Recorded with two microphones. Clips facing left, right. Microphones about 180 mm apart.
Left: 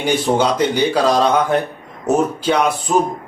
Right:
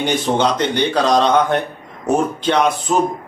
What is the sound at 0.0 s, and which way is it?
A man's voice, 5° left (ahead or behind).